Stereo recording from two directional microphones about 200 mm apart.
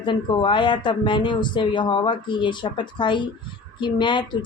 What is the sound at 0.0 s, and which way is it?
A woman's voice, 25° left (ahead or behind).